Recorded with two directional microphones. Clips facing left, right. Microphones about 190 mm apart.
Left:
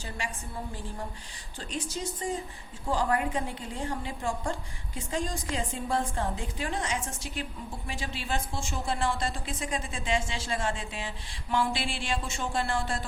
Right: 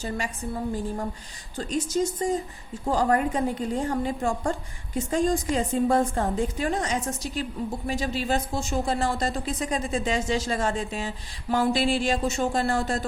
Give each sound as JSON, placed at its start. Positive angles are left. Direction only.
{"t": 1.5, "sound": "a woman's voice", "side_deg": -40}